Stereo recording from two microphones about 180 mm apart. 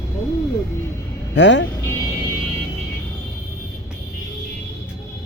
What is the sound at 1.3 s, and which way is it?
Speech, 90° left.